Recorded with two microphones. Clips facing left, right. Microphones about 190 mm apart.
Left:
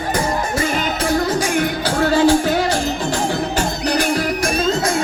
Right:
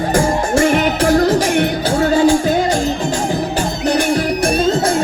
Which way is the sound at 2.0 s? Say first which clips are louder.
Right 1 dB; 20° right (ahead or behind).